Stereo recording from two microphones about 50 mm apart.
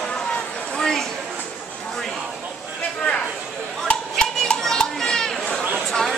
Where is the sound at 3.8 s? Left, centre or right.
Centre.